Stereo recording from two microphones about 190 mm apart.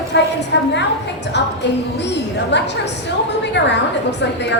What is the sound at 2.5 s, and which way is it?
A woman's voice, 65° left (ahead or behind).